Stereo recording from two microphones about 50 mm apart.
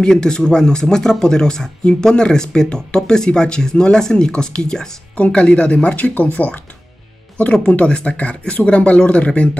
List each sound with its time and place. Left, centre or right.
0.0 s speech: centre
5.1 s speech: left
7.8 s speech: left